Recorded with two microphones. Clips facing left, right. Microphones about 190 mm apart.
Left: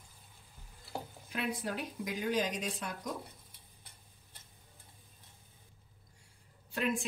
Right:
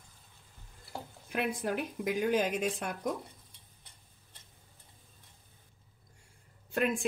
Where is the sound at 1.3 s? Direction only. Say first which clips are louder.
Right 4 dB; 55° right (ahead or behind).